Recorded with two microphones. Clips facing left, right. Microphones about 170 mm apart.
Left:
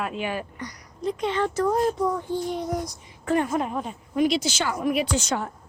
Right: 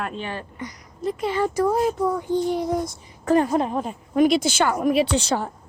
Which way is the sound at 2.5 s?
30° right (ahead or behind).